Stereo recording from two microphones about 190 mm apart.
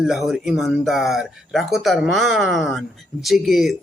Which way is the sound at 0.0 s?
Centre (ahead or behind).